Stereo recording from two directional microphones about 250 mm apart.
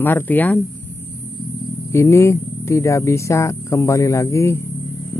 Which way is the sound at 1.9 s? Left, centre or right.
Centre.